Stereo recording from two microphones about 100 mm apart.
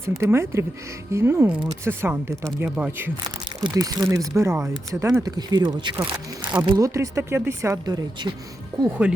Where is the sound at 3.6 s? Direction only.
40° right (ahead or behind).